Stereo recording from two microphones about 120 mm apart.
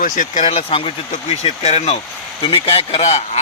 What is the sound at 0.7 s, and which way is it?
Speech, 45° left (ahead or behind).